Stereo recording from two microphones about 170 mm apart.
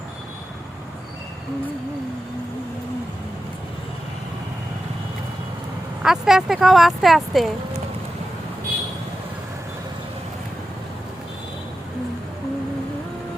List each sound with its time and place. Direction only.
6.0 s speech: centre (ahead or behind)